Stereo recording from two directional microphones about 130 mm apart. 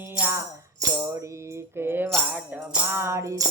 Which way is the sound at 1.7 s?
15° right (ahead or behind).